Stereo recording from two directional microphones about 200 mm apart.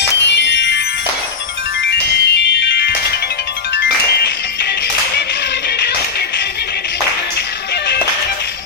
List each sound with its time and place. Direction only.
0.0 s music: 60° left (ahead or behind)
1.8 s music: 60° left (ahead or behind)
5.6 s music: 55° left (ahead or behind)